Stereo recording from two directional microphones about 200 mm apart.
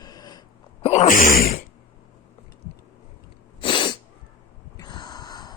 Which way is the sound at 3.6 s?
25° left (ahead or behind).